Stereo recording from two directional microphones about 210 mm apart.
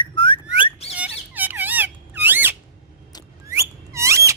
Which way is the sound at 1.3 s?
10° right (ahead or behind).